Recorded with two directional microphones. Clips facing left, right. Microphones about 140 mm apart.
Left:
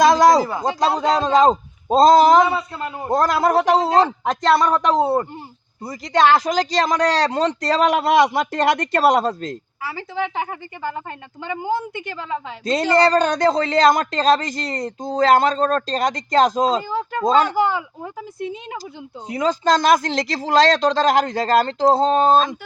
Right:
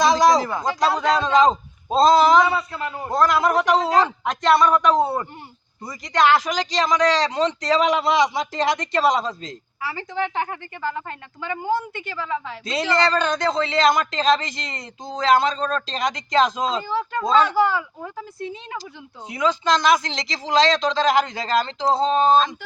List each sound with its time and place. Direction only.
0.6 s speech: 30° left (ahead or behind); by 2.4 s 45° left (ahead or behind)
2.4 s a man's voice: 25° left (ahead or behind)
3.2 s speech: 40° left (ahead or behind); by 9.6 s 60° left (ahead or behind)
9.8 s a woman's voice: 5° left (ahead or behind); by 12.5 s 20° left (ahead or behind)
12.6 s speech: 45° left (ahead or behind)
16.9 s a woman's voice: 15° left (ahead or behind)
17.2 s speech: 45° left (ahead or behind)
17.6 s a man's voice: 20° left (ahead or behind)
19.3 s speech: 40° left (ahead or behind)